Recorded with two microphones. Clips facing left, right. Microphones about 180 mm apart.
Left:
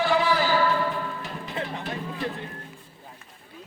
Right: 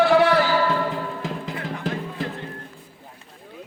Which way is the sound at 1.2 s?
90° right.